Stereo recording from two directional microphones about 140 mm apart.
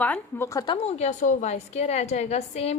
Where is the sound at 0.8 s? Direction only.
50° left (ahead or behind).